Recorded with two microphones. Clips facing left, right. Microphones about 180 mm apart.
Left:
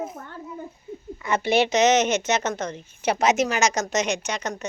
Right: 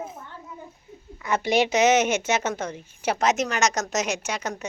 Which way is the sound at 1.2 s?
Centre (ahead or behind).